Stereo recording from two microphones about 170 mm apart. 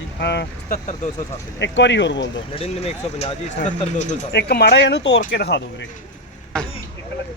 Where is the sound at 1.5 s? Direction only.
90° left.